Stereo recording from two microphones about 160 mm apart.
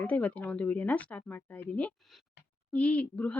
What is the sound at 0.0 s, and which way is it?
Speech, 10° left (ahead or behind).